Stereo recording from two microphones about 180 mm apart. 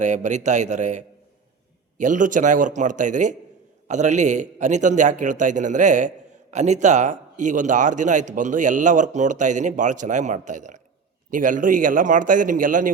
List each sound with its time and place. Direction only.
0.0 s a man's voice: 40° right (ahead or behind)